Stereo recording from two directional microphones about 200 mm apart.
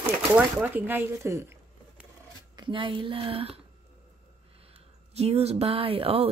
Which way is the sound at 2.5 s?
25° right (ahead or behind).